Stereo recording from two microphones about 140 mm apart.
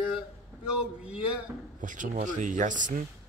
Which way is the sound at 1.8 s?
65° right (ahead or behind).